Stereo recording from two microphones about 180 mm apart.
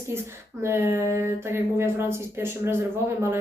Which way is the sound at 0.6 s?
15° right (ahead or behind).